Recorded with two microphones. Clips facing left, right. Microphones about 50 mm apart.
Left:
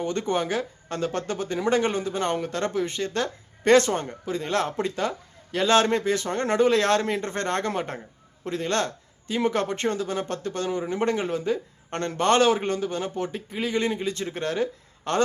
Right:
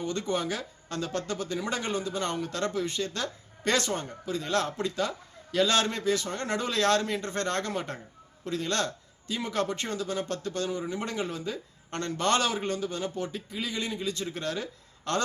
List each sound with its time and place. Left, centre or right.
0.0 s speech: left